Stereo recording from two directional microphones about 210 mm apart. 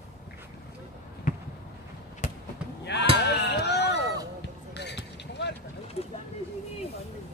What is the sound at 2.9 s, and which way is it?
Sheep, 55° left (ahead or behind).